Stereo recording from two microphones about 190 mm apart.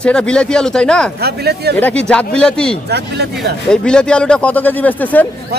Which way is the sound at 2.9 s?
60° right (ahead or behind).